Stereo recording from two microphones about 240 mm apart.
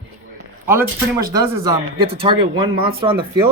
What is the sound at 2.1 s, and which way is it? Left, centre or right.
Speech, right.